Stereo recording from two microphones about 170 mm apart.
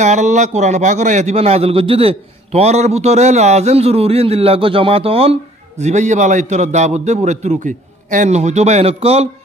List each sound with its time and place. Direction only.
0.0 s a man's voice: 45° right (ahead or behind)